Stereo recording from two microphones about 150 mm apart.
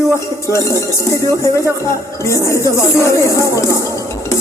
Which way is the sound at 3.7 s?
20° left (ahead or behind).